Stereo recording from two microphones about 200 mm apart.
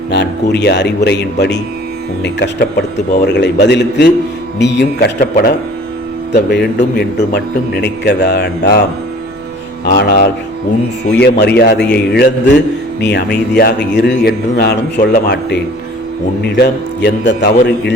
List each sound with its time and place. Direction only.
0.1 s a man's voice: 55° left (ahead or behind)
9.8 s a man's voice: 55° left (ahead or behind)